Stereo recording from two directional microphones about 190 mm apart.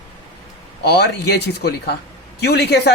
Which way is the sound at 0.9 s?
60° left (ahead or behind).